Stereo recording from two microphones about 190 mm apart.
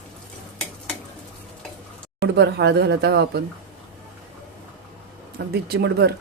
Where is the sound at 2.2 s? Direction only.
60° right (ahead or behind).